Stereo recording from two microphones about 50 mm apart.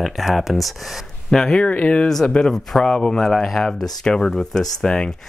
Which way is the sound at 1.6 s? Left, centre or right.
Left.